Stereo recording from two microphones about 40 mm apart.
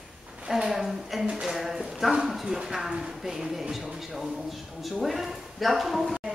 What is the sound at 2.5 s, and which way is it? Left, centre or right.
Speech, centre.